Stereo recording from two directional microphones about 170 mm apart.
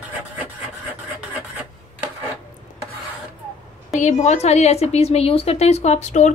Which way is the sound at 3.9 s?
45° left (ahead or behind).